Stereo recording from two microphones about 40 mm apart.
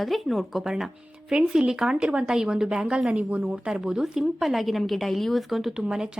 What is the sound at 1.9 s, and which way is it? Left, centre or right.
Speech, right.